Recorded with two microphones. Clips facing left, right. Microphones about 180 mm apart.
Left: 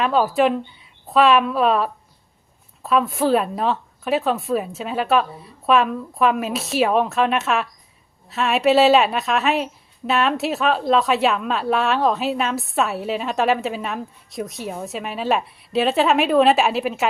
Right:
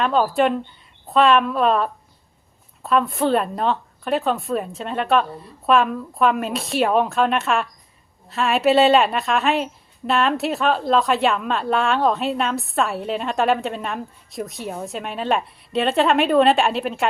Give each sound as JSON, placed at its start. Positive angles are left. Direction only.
{"t": 0.0, "sound": "speech", "side_deg": 5}